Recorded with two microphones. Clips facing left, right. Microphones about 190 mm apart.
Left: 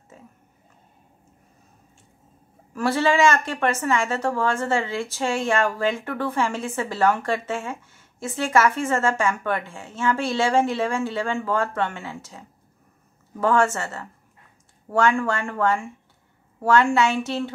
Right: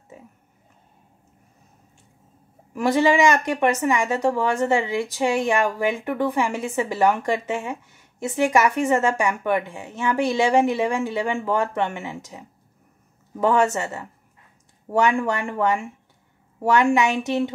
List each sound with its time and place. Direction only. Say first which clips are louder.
0.1 s a woman's voice: right 2 dB; 15° right (ahead or behind)
2.7 s a woman's voice: right 3 dB; 15° right (ahead or behind)